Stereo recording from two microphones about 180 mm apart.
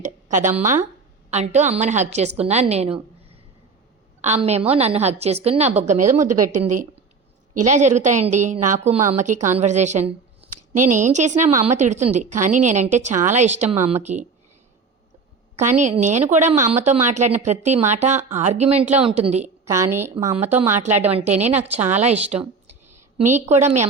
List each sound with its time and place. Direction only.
0.0 s a woman's voice: 45° right (ahead or behind)
7.7 s a woman's voice: 40° right (ahead or behind)
15.5 s a woman's voice: 40° right (ahead or behind)
19.6 s a woman's voice: 15° right (ahead or behind)
21.1 s a woman's voice: 35° right (ahead or behind)